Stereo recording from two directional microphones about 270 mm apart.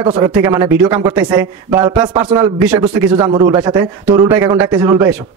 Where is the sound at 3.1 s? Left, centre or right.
Centre.